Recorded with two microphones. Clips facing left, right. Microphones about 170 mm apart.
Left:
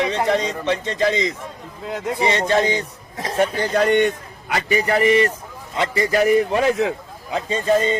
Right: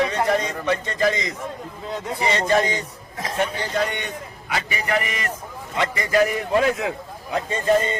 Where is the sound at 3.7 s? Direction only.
50° left (ahead or behind).